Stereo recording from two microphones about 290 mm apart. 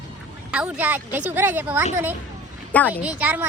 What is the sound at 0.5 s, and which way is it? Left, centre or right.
A woman's voice, centre.